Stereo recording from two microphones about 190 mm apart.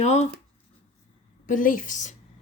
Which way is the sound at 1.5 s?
45° left (ahead or behind).